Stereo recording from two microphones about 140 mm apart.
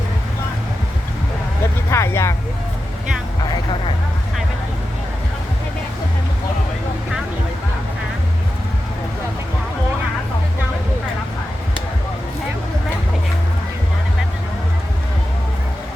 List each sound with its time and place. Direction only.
1.9 s vehicle: 20° left (ahead or behind)